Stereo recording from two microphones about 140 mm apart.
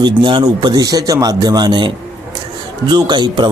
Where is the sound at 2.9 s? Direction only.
30° right (ahead or behind).